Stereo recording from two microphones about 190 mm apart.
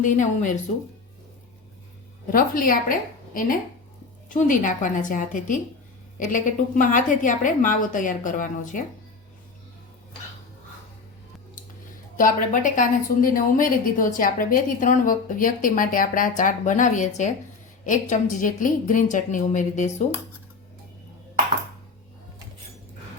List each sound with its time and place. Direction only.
0.0 s a woman's voice: 40° left (ahead or behind)
2.3 s a woman's voice: 50° left (ahead or behind)
12.1 s a woman's voice: 45° left (ahead or behind)